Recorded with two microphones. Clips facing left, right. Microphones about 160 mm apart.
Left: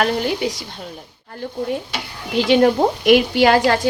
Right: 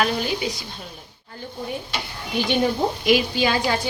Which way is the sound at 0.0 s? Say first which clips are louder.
Left 4 dB; 65° left (ahead or behind).